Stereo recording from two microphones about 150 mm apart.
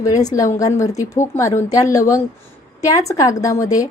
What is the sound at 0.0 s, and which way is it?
A woman's voice, 25° left (ahead or behind).